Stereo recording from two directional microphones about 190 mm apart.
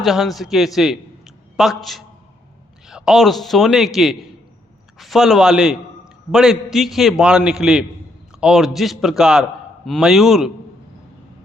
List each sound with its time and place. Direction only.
0.0 s a man's voice: centre (ahead or behind)